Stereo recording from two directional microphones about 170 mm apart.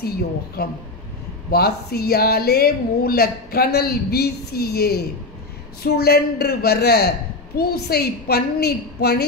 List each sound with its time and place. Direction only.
0.6 s a woman's voice: 65° left (ahead or behind)